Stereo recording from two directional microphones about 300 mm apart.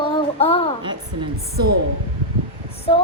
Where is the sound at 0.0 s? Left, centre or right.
Centre.